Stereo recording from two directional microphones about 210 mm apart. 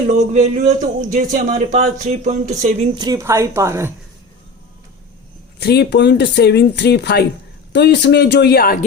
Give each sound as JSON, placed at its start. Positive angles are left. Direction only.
{"t": 0.2, "sound": "speech", "side_deg": -35}
{"t": 3.0, "sound": "speech", "side_deg": -15}
{"t": 5.5, "sound": "speech", "side_deg": 50}